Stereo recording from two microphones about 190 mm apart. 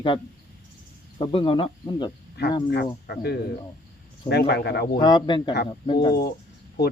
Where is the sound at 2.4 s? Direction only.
60° left (ahead or behind).